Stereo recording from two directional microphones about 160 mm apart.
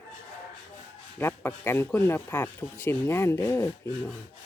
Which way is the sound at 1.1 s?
15° left (ahead or behind).